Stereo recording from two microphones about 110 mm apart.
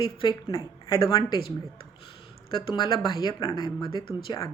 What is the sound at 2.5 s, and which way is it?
Speech, 40° left (ahead or behind).